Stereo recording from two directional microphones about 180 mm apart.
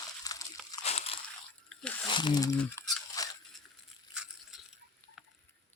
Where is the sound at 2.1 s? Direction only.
25° left (ahead or behind).